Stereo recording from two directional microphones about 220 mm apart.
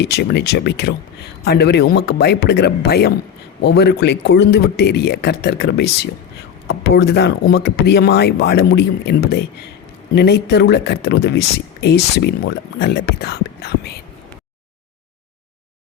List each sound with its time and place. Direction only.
0.0 s speech: 50° left (ahead or behind)